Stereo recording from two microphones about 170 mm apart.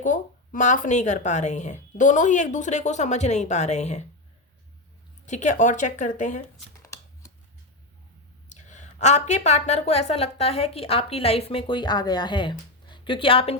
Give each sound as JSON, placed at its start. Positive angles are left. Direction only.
{"t": 0.0, "sound": "speech", "side_deg": 50}
{"t": 5.2, "sound": "speech", "side_deg": 45}
{"t": 6.8, "sound": "shuffling cards", "side_deg": 20}
{"t": 8.4, "sound": "a woman's voice", "side_deg": 45}